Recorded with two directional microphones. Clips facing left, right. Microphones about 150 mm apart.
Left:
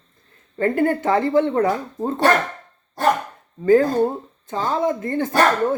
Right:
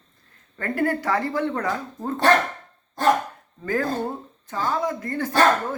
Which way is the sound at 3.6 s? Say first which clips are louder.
Left 10 dB; 25° left (ahead or behind).